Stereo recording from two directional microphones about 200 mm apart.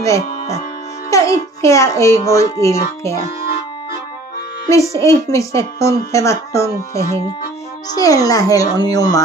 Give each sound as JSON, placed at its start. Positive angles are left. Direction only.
{"t": 0.0, "sound": "a child's voice", "side_deg": 15}
{"t": 4.6, "sound": "a child's voice", "side_deg": 15}